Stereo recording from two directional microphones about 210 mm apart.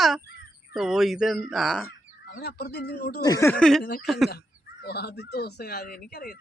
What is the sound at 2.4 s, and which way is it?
Speech, 50° left (ahead or behind).